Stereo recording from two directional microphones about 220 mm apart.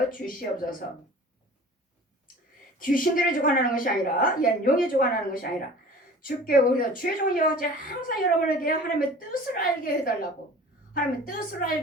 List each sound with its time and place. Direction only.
0.1 s a woman's voice: 40° left (ahead or behind)
2.7 s a woman's voice: 40° left (ahead or behind)